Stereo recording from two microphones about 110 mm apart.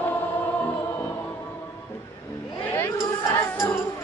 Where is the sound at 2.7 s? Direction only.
20° left (ahead or behind).